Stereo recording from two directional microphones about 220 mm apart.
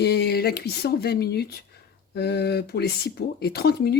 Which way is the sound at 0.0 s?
45° left (ahead or behind).